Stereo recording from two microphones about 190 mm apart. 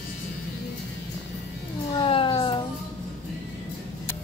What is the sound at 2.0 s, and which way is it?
Cat, 30° left (ahead or behind).